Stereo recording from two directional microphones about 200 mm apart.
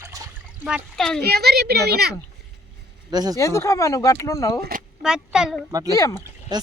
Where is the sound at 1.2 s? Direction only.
50° right (ahead or behind).